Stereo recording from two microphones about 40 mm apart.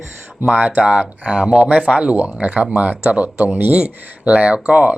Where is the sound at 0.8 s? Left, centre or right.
Right.